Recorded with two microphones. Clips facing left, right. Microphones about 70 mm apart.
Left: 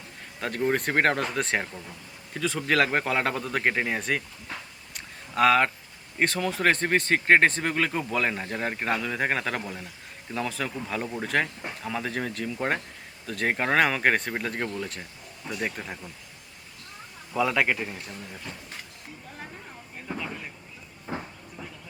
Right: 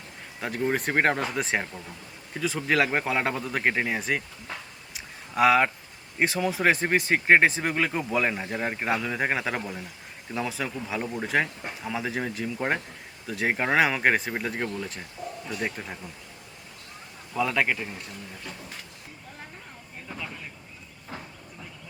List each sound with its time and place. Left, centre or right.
0.3 s speech: centre
4.9 s a sound: centre
6.1 s speech: centre
17.3 s speech: centre
20.1 s vehicle: centre
21.1 s train: left